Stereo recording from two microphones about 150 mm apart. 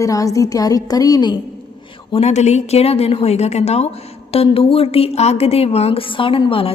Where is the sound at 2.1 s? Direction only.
45° left (ahead or behind).